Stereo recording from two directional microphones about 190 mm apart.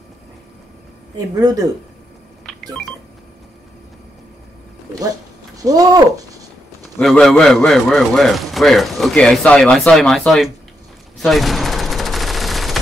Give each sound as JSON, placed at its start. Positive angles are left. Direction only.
{"t": 1.1, "sound": "speech", "side_deg": -20}
{"t": 2.4, "sound": "telephone dialing", "side_deg": 0}
{"t": 5.6, "sound": "speech", "side_deg": -20}
{"t": 6.8, "sound": "a man's voice", "side_deg": 0}
{"t": 11.1, "sound": "fusillade", "side_deg": 0}